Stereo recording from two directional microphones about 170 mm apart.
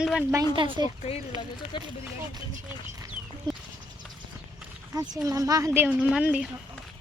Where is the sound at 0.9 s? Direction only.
35° left (ahead or behind).